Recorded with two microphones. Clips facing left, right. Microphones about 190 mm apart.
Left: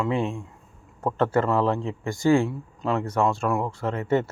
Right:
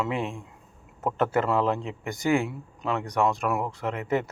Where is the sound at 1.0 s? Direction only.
20° right (ahead or behind).